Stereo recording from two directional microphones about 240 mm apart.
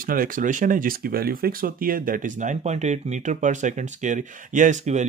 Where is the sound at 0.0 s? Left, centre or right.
Right.